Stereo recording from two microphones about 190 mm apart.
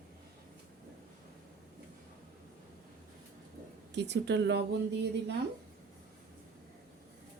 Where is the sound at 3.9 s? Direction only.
65° right (ahead or behind).